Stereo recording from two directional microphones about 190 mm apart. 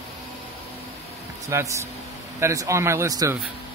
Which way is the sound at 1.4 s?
15° right (ahead or behind).